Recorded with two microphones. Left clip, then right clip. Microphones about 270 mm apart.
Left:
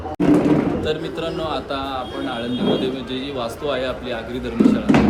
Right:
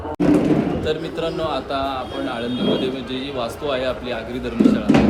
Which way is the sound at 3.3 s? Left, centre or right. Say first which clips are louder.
Even; centre.